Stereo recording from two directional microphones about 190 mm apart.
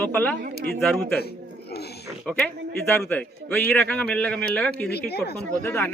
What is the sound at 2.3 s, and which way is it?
A man's voice, 5° left (ahead or behind).